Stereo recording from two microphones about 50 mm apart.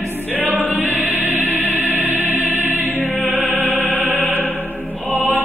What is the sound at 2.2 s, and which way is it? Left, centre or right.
Music, right.